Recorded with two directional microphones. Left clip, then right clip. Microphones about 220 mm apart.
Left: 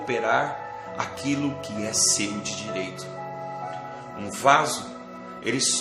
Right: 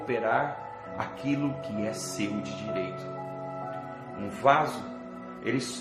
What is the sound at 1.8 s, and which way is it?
Speech, 15° left (ahead or behind).